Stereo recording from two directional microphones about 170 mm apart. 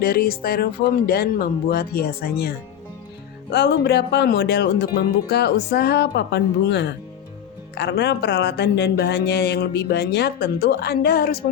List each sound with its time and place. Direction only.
0.0 s speech: 60° left (ahead or behind)
3.5 s speech: 70° left (ahead or behind)